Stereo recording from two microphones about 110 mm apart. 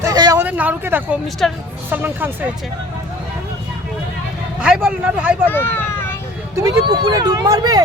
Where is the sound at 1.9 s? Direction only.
20° right (ahead or behind).